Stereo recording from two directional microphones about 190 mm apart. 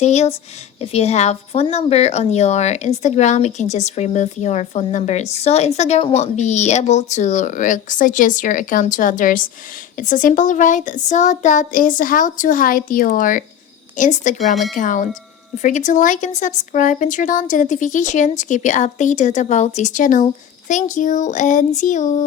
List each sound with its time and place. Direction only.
0.0 s a child's voice: 35° left (ahead or behind)
14.5 s speech: centre (ahead or behind)
14.8 s a child's voice: 45° left (ahead or behind)